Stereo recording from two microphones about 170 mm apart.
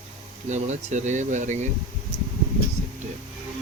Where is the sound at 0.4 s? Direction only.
45° right (ahead or behind).